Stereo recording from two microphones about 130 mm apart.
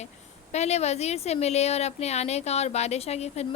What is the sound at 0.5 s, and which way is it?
Speech, 55° left (ahead or behind).